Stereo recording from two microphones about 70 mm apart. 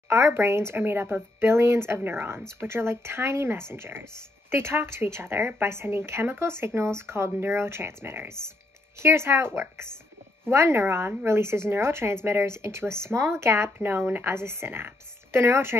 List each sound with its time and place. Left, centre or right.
0.1 s speech: right